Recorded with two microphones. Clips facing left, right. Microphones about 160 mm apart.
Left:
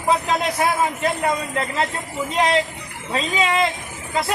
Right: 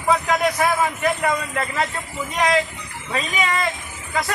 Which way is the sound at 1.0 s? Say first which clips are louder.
Even; 25° left (ahead or behind).